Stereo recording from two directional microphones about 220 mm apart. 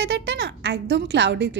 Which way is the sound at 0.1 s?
50° right (ahead or behind).